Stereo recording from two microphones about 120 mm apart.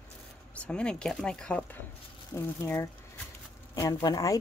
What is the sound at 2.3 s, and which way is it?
Speech, 20° left (ahead or behind).